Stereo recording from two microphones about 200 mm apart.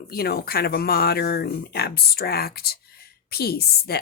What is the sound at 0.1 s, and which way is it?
A woman's voice, 50° left (ahead or behind).